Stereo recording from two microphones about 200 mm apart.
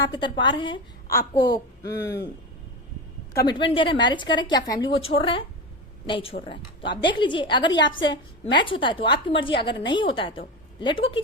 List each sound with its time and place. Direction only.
0.0 s a woman's voice: 25° left (ahead or behind)
3.4 s a woman's voice: 25° left (ahead or behind)
7.7 s a woman's voice: 65° left (ahead or behind)
8.4 s a woman's voice: 25° left (ahead or behind)